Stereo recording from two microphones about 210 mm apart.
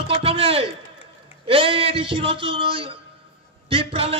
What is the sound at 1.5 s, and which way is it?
A man's voice, 25° right (ahead or behind).